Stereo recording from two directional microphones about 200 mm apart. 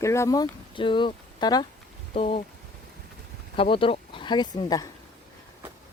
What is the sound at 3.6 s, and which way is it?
Speech, 25° left (ahead or behind).